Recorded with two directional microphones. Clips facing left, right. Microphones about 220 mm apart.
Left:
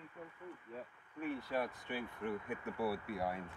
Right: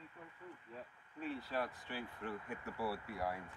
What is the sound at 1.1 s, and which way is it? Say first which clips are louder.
Speech: left 2 dB; 15° left (ahead or behind).